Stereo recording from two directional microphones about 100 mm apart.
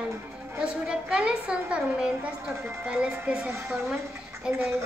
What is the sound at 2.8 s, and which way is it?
Speech, 15° right (ahead or behind).